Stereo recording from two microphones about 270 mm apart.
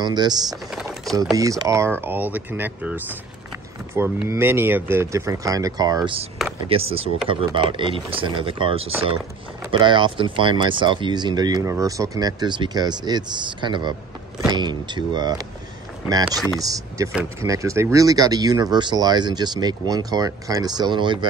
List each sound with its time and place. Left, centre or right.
0.0 s speech: centre
0.7 s a sound: centre
1.3 s speech: centre